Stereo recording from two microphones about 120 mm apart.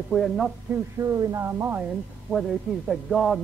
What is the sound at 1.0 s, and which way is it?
Speech, 25° right (ahead or behind).